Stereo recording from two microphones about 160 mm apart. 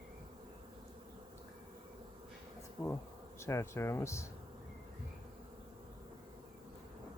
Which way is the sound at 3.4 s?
15° left (ahead or behind).